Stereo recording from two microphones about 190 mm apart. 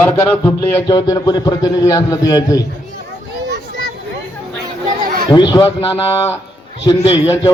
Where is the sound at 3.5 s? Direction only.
60° right (ahead or behind).